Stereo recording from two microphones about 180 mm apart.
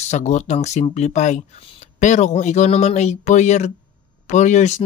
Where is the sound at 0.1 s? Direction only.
40° left (ahead or behind).